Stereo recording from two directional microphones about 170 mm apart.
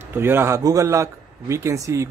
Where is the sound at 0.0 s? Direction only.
15° right (ahead or behind).